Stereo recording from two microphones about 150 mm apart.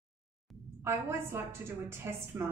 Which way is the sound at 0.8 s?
15° right (ahead or behind).